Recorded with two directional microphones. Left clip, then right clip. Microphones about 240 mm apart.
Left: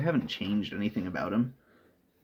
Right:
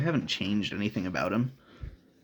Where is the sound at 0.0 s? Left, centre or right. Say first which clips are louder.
Right 1 dB; right.